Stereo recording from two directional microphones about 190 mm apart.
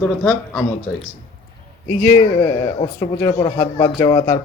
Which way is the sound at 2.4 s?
25° left (ahead or behind).